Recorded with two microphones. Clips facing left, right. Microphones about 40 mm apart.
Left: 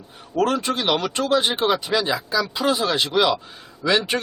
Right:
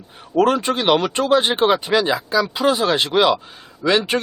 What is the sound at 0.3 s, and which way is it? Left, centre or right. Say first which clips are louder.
Speech: right 4 dB; centre.